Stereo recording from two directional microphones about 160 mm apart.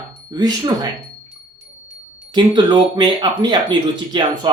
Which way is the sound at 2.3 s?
30° right (ahead or behind).